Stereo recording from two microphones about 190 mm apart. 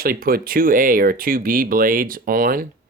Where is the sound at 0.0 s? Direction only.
50° right (ahead or behind).